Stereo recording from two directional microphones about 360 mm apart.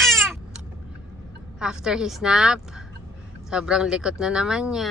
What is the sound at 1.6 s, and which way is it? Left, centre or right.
A child's voice, centre.